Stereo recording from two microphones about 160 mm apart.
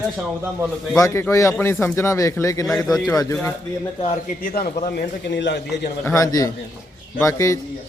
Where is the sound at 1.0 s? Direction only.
15° left (ahead or behind).